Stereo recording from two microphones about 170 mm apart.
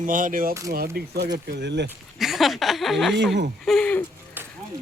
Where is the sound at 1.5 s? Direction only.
90° right.